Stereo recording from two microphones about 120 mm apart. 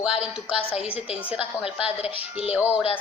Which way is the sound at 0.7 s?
55° left (ahead or behind).